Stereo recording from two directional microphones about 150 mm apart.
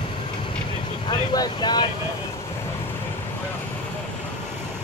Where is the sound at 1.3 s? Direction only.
25° left (ahead or behind).